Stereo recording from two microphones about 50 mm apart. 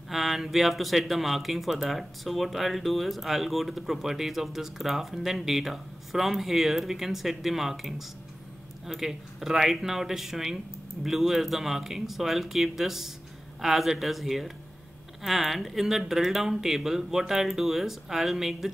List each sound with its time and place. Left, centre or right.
0.1 s speech: centre